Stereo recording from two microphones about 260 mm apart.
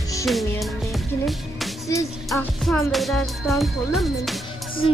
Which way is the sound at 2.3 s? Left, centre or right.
Centre.